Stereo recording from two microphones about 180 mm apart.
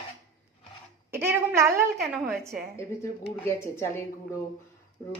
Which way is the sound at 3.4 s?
15° left (ahead or behind).